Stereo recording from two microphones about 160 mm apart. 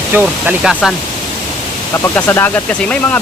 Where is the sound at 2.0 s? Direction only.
15° left (ahead or behind).